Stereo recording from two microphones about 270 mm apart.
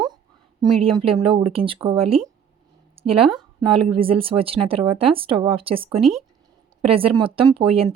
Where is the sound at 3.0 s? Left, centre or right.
Centre.